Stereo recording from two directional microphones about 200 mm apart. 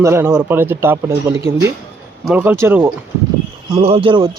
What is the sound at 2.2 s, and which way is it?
Speech, 5° right (ahead or behind).